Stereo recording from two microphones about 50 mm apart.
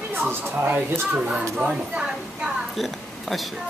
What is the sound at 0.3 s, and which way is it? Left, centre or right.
Speech, right.